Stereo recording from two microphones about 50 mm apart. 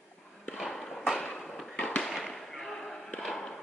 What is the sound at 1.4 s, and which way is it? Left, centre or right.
Fireworks, centre.